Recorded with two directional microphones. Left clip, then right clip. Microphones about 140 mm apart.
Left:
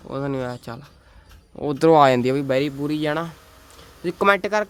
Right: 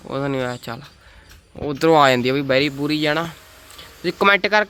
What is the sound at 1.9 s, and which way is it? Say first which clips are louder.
Speech: right 1 dB; 15° left (ahead or behind).